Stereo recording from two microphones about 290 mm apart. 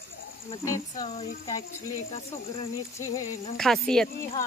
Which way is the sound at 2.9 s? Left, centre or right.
Centre.